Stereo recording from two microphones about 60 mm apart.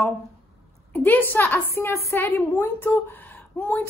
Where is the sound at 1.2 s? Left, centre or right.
Left.